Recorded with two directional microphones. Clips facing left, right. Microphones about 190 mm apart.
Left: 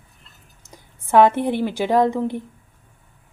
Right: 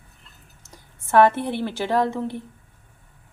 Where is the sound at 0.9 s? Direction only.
15° left (ahead or behind).